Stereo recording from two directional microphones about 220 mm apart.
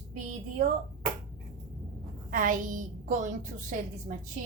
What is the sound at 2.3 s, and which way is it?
A woman's voice, 35° right (ahead or behind).